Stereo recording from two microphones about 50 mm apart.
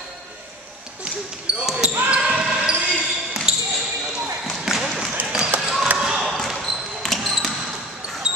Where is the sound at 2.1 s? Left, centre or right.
Right.